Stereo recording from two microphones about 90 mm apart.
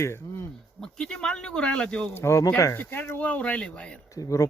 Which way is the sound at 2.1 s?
35° left (ahead or behind).